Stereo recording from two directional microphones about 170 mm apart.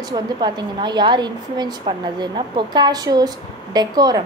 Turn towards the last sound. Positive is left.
turn(degrees=-25)  # may be behind; listen again after turning